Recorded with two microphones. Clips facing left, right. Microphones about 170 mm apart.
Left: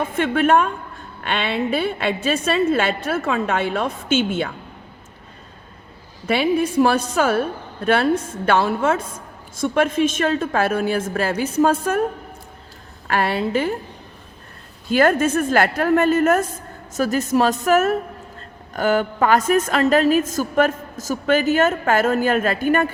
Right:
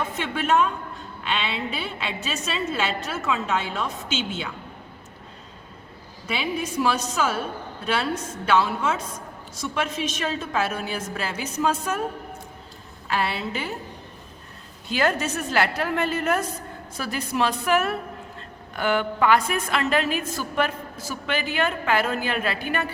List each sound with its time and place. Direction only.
0.0 s a woman's voice: 55° left (ahead or behind)
6.2 s a woman's voice: 55° left (ahead or behind)
13.1 s a woman's voice: 55° left (ahead or behind)
14.8 s a woman's voice: 50° left (ahead or behind)